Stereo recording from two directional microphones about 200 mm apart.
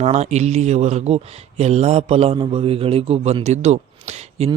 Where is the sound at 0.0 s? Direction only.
35° right (ahead or behind).